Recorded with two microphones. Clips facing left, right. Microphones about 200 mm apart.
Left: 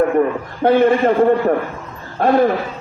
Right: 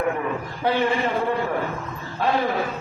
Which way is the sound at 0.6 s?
50° left (ahead or behind).